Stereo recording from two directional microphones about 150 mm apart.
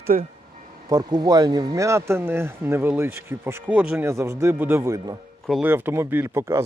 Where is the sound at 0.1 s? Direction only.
60° right (ahead or behind).